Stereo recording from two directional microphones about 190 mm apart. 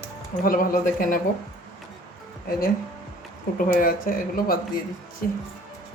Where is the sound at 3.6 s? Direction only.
45° left (ahead or behind).